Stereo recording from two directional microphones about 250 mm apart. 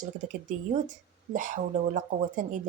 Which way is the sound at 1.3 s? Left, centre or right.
Right.